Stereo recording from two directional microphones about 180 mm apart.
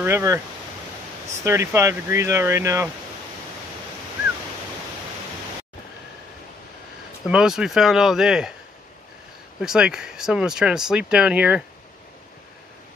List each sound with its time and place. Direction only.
0.0 s speech: 15° right (ahead or behind)
1.4 s speech: 15° right (ahead or behind)
7.2 s speech: 5° right (ahead or behind)
9.6 s speech: 5° right (ahead or behind)